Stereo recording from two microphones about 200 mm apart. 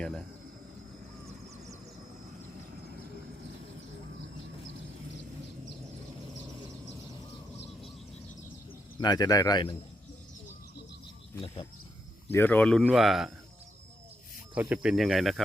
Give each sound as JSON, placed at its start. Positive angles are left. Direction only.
{"t": 9.0, "sound": "speech", "side_deg": 20}
{"t": 11.3, "sound": "speech", "side_deg": 25}
{"t": 12.3, "sound": "speech", "side_deg": 10}
{"t": 14.5, "sound": "speech", "side_deg": -5}